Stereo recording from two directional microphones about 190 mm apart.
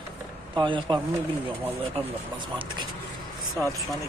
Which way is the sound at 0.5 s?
25° right (ahead or behind).